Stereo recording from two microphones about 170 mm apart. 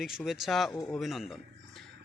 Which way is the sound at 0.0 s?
Centre (ahead or behind).